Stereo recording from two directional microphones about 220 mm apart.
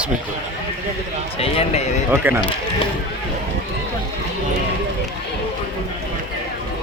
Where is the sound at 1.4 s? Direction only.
30° left (ahead or behind).